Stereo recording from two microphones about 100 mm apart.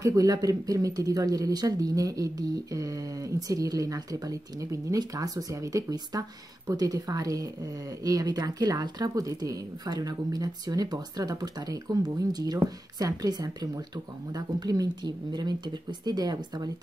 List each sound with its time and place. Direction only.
0.0 s a woman's voice: 35° right (ahead or behind)